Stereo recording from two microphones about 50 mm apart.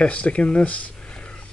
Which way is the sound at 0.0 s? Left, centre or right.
Left.